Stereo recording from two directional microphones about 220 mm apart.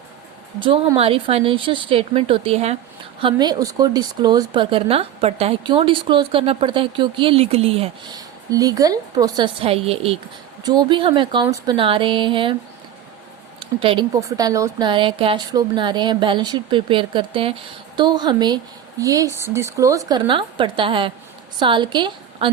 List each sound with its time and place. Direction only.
0.6 s speech: 25° right (ahead or behind)
13.6 s speech: 25° right (ahead or behind)